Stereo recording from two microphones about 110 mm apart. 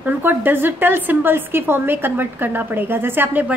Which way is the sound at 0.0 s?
20° right (ahead or behind).